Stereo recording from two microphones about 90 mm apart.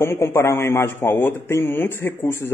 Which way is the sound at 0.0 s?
30° left (ahead or behind).